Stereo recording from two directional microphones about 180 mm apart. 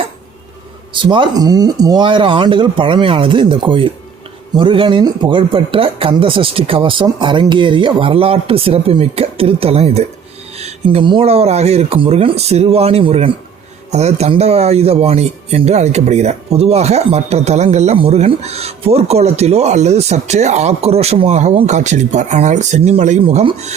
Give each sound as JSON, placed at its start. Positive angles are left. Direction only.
{"t": 0.9, "sound": "speech", "side_deg": -25}